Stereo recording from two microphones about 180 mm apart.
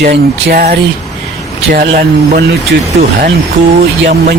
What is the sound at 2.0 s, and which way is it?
Speech, 60° right (ahead or behind).